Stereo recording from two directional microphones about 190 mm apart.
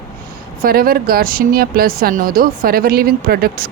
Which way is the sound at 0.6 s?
50° right (ahead or behind).